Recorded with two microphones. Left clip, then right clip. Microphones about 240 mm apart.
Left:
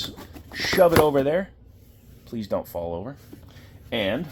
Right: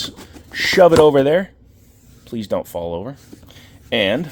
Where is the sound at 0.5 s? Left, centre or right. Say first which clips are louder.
Right 7 dB; right.